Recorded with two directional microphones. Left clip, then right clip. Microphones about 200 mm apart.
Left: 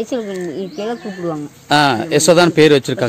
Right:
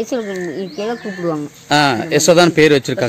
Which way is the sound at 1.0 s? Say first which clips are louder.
Right 2 dB; 20° right (ahead or behind).